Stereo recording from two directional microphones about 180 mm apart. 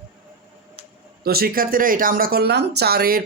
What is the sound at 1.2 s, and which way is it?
Speech, 60° right (ahead or behind).